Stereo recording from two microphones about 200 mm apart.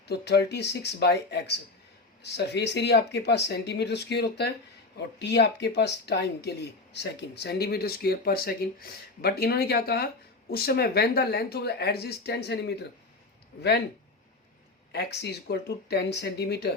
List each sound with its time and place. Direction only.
0.1 s speech: 55° left (ahead or behind)
14.9 s speech: 55° left (ahead or behind)